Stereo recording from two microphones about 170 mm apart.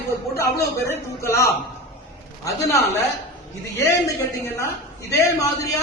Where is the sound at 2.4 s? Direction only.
20° left (ahead or behind).